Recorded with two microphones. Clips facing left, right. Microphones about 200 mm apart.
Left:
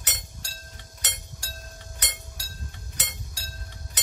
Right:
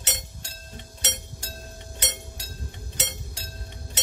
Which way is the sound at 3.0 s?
25° right (ahead or behind).